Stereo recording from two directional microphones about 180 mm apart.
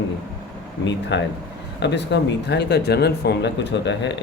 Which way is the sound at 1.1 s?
75° left (ahead or behind).